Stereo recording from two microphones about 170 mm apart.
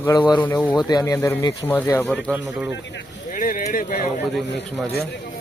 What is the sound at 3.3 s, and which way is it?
Speech, 50° left (ahead or behind).